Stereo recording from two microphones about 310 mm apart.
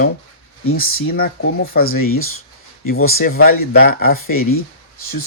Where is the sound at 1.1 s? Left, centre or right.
Left.